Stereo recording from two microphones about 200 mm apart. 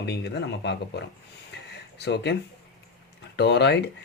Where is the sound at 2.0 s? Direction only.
55° left (ahead or behind).